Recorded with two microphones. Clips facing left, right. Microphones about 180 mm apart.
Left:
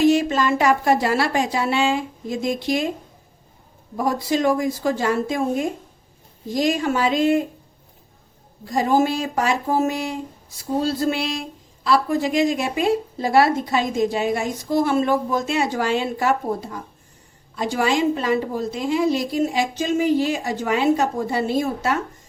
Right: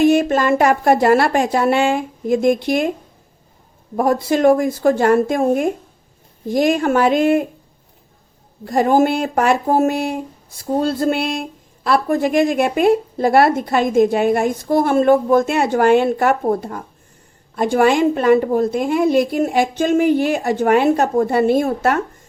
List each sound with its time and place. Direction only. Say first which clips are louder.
0.0 s a woman's voice: right 3 dB; 55° right (ahead or behind)
3.9 s a woman's voice: right 5 dB; 55° right (ahead or behind)
8.6 s a woman's voice: right 4 dB; 55° right (ahead or behind)